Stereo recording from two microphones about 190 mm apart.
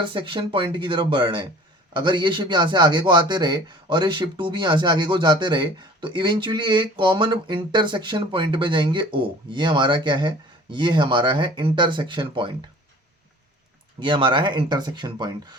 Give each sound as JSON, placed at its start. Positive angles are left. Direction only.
{"t": 0.0, "sound": "a man's voice", "side_deg": -25}
{"t": 14.0, "sound": "a man's voice", "side_deg": -25}